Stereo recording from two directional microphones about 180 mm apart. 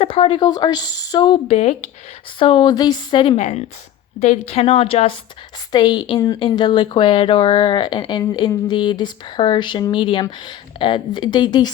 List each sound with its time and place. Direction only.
0.0 s speech: 30° left (ahead or behind)
1.5 s a woman's voice: 40° left (ahead or behind)
2.4 s a woman's voice: 25° left (ahead or behind)